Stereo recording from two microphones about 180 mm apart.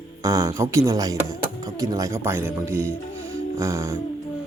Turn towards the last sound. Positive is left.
turn(degrees=-15)  # may be behind; listen again after turning